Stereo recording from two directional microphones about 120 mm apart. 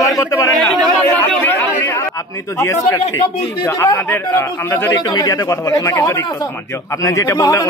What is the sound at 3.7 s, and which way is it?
A man's voice, 25° left (ahead or behind).